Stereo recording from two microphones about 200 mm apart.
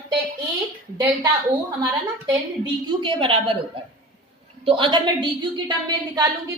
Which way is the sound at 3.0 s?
25° right (ahead or behind).